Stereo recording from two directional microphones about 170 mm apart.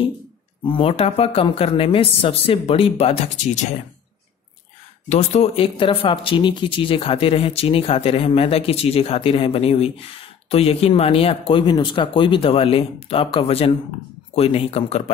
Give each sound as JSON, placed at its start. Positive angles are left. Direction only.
{"t": 0.7, "sound": "speech", "side_deg": 30}
{"t": 5.1, "sound": "speech", "side_deg": 40}